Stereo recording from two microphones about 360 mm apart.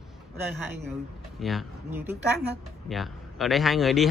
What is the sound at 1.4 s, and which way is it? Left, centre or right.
Speech, centre.